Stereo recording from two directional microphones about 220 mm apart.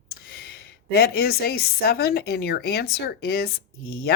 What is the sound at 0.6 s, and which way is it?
A woman's voice, 45° left (ahead or behind).